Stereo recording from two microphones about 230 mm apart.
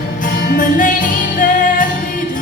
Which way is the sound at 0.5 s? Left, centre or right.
Left.